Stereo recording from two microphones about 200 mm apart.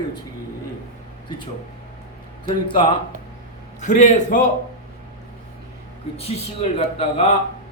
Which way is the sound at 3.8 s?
35° left (ahead or behind).